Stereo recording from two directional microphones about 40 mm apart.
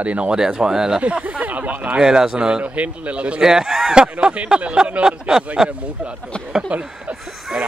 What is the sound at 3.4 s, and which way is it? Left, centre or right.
Speech, centre.